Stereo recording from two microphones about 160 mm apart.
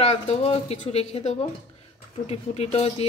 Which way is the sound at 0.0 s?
40° left (ahead or behind).